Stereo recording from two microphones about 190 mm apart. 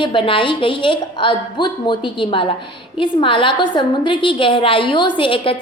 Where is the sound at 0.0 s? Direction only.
25° left (ahead or behind).